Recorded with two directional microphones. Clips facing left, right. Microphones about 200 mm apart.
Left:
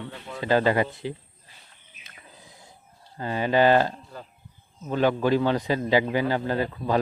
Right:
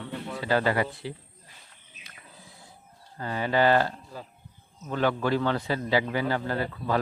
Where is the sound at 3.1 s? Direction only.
20° left (ahead or behind).